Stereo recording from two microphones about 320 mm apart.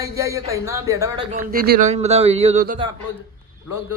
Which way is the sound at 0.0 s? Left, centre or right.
Centre.